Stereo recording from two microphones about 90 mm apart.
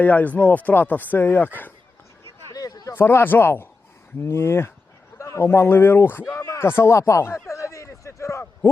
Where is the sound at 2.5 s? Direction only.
45° left (ahead or behind).